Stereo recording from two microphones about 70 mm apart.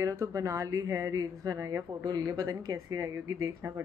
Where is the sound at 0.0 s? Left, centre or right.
Right.